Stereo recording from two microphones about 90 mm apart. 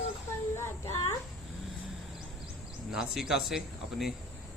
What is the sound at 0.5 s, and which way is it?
Child singing, 30° left (ahead or behind).